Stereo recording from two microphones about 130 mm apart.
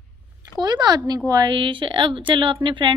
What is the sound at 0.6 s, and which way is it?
A woman's voice, 30° right (ahead or behind).